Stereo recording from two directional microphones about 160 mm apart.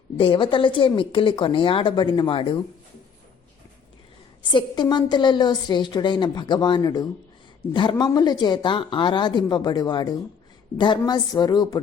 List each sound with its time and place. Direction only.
0.2 s a woman's voice: 30° left (ahead or behind)
4.5 s a woman's voice: 25° left (ahead or behind)